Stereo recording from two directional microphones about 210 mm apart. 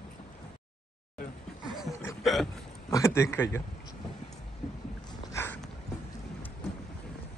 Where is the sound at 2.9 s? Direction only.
15° left (ahead or behind).